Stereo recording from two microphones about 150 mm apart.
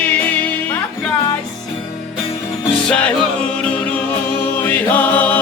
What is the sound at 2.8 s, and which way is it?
Music, 5° left (ahead or behind).